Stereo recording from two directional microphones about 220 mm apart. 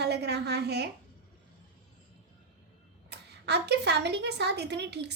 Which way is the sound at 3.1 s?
50° right (ahead or behind).